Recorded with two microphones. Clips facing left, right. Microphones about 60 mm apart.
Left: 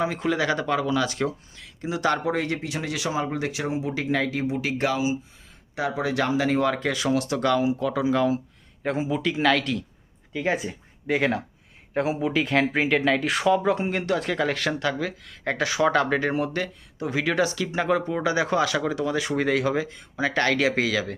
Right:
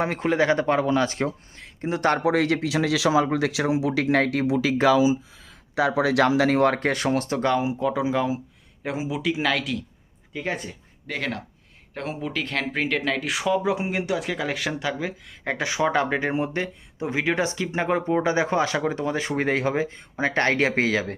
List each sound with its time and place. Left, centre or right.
0.0 s speech: right
0.3 s speech: right
2.2 s speech: right
5.7 s speech: right; by 10.8 s centre
11.0 s speech: centre; by 21.2 s right